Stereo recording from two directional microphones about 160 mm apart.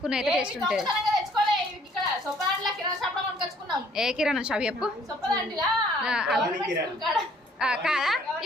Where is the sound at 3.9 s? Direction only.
5° right (ahead or behind).